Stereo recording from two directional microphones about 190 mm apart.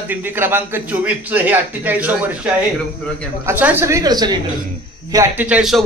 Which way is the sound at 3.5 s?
10° right (ahead or behind).